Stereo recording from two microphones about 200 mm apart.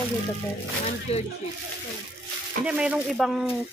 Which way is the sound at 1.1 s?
30° left (ahead or behind).